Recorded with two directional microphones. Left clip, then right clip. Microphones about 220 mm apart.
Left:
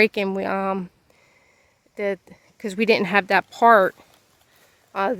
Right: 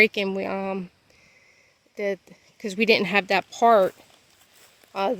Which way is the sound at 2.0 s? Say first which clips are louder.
Left 2 dB; 10° left (ahead or behind).